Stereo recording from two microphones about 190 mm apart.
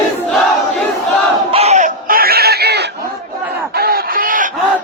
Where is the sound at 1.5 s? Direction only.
30° right (ahead or behind); by 2.8 s 60° right (ahead or behind).